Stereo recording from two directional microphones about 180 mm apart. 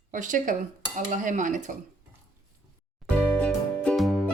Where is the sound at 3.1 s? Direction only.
5° left (ahead or behind).